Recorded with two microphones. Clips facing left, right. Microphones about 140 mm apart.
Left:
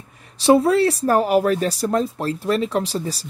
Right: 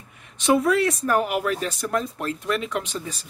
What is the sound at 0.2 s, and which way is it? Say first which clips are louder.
Speech: left 5 dB; 35° left (ahead or behind).